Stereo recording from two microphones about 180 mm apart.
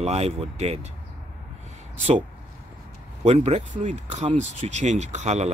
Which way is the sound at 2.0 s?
40° right (ahead or behind).